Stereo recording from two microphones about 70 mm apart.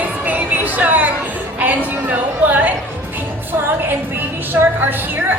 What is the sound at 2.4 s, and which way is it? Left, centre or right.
Music, right.